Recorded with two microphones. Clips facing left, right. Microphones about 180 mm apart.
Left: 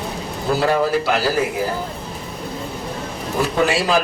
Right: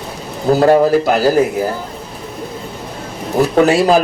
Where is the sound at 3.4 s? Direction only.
40° right (ahead or behind).